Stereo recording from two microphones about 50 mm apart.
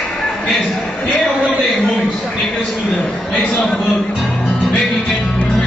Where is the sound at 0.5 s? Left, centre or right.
Left.